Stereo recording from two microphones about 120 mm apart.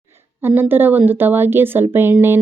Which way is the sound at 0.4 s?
15° right (ahead or behind).